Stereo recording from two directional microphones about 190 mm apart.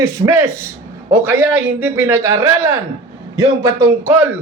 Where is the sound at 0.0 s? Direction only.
15° right (ahead or behind).